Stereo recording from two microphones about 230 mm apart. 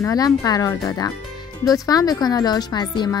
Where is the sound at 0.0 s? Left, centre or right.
Centre.